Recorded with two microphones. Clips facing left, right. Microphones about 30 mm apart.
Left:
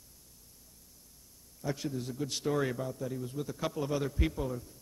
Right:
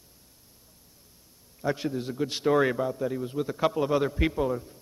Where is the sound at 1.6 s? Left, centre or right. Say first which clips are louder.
Right 7 dB; right.